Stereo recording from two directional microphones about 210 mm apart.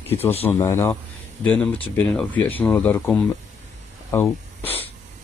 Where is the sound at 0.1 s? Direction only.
10° left (ahead or behind).